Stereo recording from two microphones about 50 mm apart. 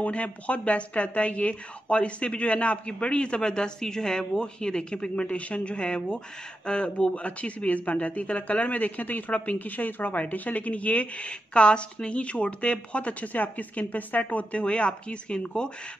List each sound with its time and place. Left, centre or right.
0.0 s a woman's voice: left